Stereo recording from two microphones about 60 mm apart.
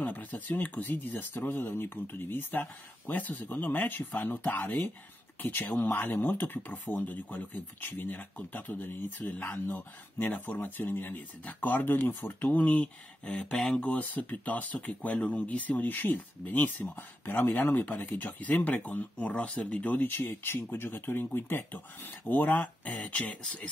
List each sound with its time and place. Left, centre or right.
0.0 s speech: left